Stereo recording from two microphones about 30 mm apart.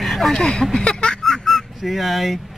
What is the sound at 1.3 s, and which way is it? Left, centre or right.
Honk, centre.